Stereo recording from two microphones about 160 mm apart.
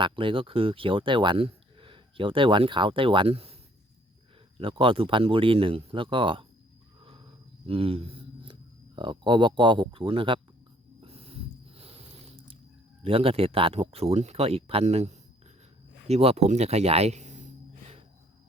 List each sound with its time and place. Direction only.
0.0 s speech: 35° right (ahead or behind)
4.6 s speech: 35° right (ahead or behind)
7.0 s a sound: 35° right (ahead or behind)
9.0 s speech: 30° right (ahead or behind)
11.0 s a sound: 40° right (ahead or behind)
13.0 s speech: 35° right (ahead or behind)